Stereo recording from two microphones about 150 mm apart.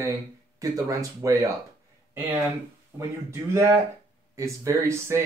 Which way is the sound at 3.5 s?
15° right (ahead or behind).